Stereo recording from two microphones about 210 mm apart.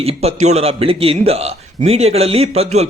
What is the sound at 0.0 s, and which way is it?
A man's voice, 30° right (ahead or behind).